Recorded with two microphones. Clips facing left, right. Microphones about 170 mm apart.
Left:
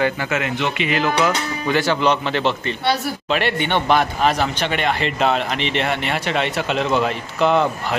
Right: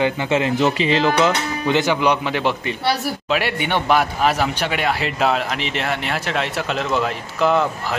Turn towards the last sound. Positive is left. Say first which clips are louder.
# left 1 dB
turn(degrees=0)  # may be behind; listen again after turning